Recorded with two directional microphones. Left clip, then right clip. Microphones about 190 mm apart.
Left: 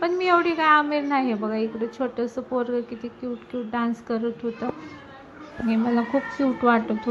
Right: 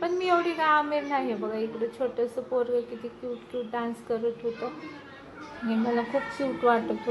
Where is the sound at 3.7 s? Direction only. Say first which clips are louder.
Left 5 dB; 10° left (ahead or behind).